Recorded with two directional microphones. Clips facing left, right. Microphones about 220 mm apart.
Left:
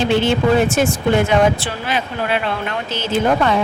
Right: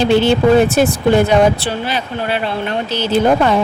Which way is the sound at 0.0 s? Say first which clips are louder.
Right 4 dB; 35° right (ahead or behind).